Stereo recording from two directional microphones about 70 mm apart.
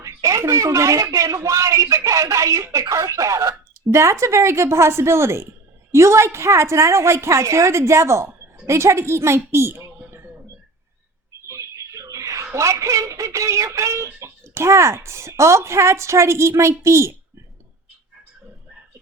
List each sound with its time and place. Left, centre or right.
0.0 s a woman's voice: right
3.9 s a woman's voice: right
11.4 s a sound: right
12.5 s speech: right